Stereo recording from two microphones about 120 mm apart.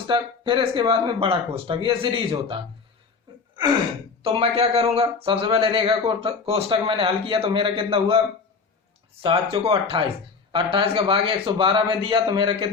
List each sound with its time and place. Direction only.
0.1 s speech: 45° right (ahead or behind)
4.2 s speech: 50° right (ahead or behind)
9.2 s speech: 50° right (ahead or behind)